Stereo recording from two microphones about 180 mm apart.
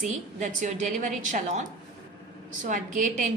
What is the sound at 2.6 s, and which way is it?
Speech, 45° right (ahead or behind).